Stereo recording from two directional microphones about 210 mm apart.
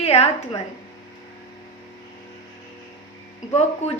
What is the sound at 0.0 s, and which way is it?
Speech, 30° left (ahead or behind).